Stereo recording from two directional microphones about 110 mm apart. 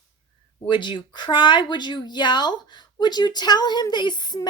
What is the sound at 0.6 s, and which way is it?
Speech, 45° left (ahead or behind).